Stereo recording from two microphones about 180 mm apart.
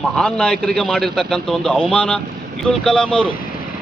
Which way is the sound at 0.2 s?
5° left (ahead or behind).